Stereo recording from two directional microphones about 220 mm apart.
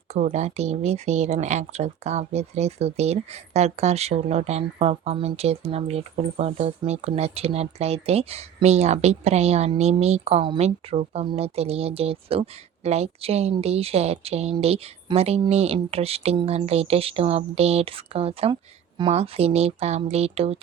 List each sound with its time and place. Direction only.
0.1 s speech: 35° right (ahead or behind)